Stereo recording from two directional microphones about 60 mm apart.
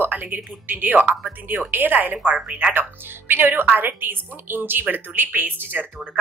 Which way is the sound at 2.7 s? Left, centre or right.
Right.